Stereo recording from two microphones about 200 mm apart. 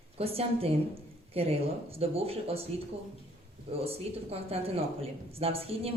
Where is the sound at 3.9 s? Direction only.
30° right (ahead or behind).